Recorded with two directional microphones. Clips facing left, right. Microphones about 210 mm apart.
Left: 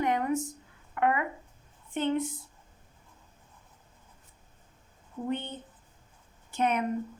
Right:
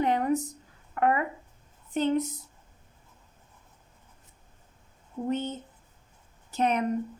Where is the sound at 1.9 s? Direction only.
40° right (ahead or behind).